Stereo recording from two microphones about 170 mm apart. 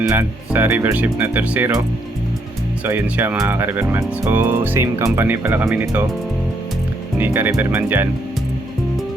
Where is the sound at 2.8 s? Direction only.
10° right (ahead or behind).